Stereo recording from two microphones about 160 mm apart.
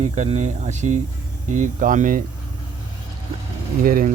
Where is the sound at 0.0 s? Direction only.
50° right (ahead or behind).